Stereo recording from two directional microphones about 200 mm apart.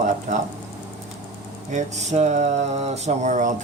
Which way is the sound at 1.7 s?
35° right (ahead or behind).